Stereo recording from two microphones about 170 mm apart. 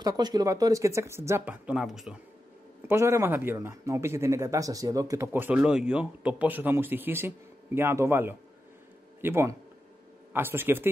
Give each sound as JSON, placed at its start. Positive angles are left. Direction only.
{"t": 0.0, "sound": "speech", "side_deg": -25}
{"t": 2.9, "sound": "speech", "side_deg": -15}